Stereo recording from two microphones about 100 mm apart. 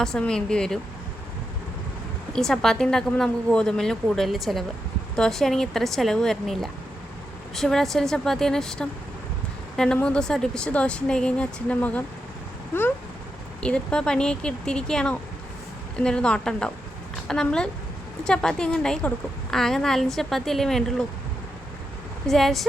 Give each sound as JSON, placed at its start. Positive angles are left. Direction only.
{"t": 0.0, "sound": "speech", "side_deg": 5}
{"t": 2.3, "sound": "a woman's voice", "side_deg": 5}
{"t": 12.7, "sound": "a sound", "side_deg": 25}
{"t": 13.6, "sound": "a woman's voice", "side_deg": 10}
{"t": 22.3, "sound": "a woman's voice", "side_deg": 5}